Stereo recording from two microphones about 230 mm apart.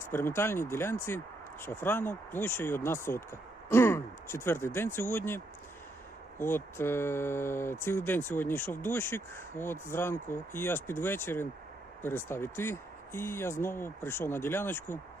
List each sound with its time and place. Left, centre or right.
0.1 s speech: centre
6.4 s speech: centre